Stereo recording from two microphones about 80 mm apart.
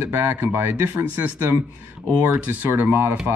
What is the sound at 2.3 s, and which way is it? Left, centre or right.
Speech, right.